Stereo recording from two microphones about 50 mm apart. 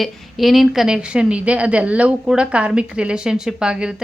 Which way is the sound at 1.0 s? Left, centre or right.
Centre.